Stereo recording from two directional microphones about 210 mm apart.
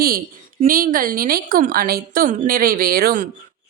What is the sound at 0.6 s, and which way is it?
A woman's voice, 40° right (ahead or behind).